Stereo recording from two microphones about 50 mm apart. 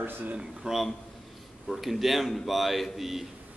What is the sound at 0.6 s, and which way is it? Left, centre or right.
Speech, centre.